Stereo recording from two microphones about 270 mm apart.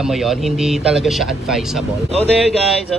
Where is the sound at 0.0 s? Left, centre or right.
Centre.